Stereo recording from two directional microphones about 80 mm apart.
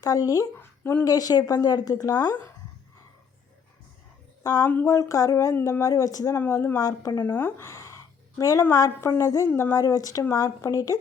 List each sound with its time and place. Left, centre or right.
0.0 s speech: left
0.6 s a sound: left
1.0 s speech: left
4.6 s speech: left
4.9 s speech: left
5.5 s speech: left
5.8 s speech: left
6.3 s speech: left
6.7 s speech: left
7.3 s a sound: left
8.7 s a woman's voice: left
9.5 s speech: left
9.7 s speech: left